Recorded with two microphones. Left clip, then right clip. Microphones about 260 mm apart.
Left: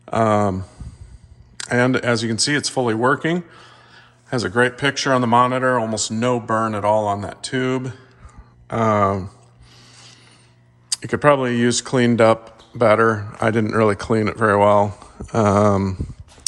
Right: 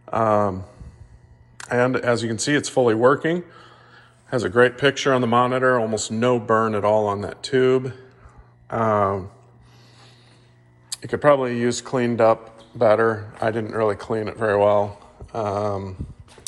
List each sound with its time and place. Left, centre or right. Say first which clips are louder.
0.0 s speech: left 2 dB; left
10.8 s speech: left 2 dB; left